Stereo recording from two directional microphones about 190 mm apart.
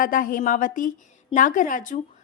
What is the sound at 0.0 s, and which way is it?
A woman's voice, 45° left (ahead or behind).